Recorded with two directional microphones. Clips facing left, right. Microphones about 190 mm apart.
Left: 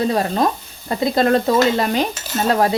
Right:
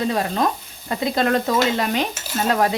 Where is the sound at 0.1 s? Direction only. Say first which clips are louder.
Left 3 dB; 35° left (ahead or behind).